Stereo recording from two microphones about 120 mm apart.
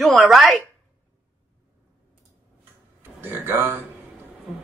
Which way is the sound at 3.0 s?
20° right (ahead or behind).